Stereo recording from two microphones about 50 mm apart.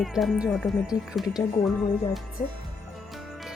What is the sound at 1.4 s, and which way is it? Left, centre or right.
Speech, left.